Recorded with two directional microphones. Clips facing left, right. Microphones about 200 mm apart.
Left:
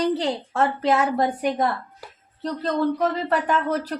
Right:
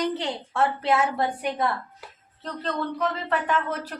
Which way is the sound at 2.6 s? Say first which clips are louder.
Left 5 dB; 40° left (ahead or behind).